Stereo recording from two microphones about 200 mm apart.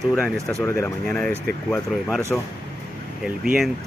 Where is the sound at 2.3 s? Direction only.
Centre (ahead or behind).